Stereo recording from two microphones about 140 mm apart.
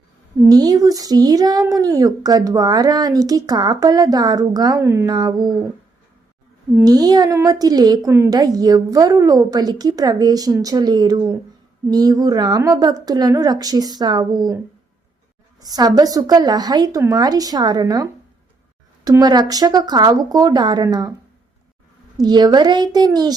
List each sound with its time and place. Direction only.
0.4 s speech: 25° right (ahead or behind)
6.8 s speech: 30° right (ahead or behind)
15.6 s speech: 25° right (ahead or behind)
22.2 s speech: 30° right (ahead or behind)